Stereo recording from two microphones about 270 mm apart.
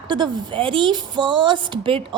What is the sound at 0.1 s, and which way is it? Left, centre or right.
A woman's voice, centre.